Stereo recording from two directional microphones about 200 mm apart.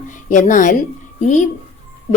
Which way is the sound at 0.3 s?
40° left (ahead or behind).